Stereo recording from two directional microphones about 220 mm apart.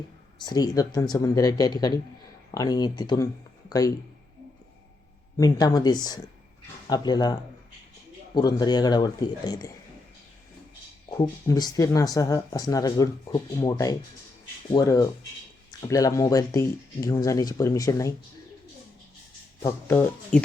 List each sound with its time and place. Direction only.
0.3 s a man's voice: 20° left (ahead or behind)
5.4 s a man's voice: 15° left (ahead or behind)
8.4 s a man's voice: 20° left (ahead or behind)
11.1 s speech: 15° left (ahead or behind)
19.6 s speech: 10° left (ahead or behind)